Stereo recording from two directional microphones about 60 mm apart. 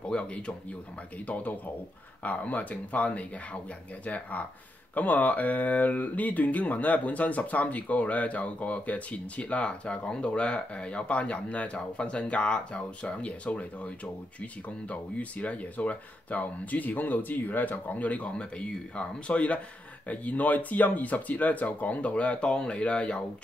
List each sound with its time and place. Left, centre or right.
0.1 s speech: centre